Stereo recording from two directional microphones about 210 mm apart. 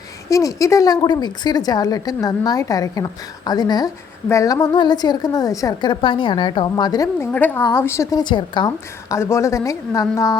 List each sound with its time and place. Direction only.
0.3 s a woman's voice: 15° left (ahead or behind)